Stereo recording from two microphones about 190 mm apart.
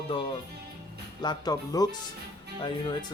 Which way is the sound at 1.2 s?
20° left (ahead or behind).